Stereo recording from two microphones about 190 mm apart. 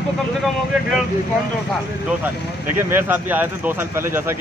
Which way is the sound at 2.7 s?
10° right (ahead or behind).